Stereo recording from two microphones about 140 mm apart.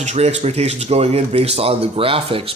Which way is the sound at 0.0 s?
50° right (ahead or behind).